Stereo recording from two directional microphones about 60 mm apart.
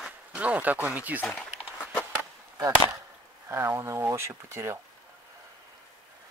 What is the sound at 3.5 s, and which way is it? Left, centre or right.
Speech, right.